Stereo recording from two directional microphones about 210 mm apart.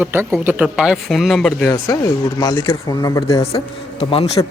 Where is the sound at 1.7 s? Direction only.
15° left (ahead or behind).